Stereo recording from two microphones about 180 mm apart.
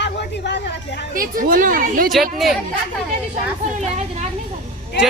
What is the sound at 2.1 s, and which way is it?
Speech, centre (ahead or behind).